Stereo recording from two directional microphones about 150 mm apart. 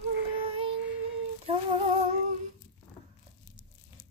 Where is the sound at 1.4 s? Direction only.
40° right (ahead or behind).